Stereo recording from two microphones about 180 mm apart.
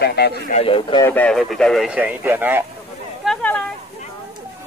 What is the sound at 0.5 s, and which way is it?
Speech, 30° left (ahead or behind).